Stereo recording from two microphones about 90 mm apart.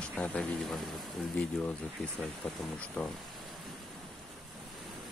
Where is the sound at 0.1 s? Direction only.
15° left (ahead or behind).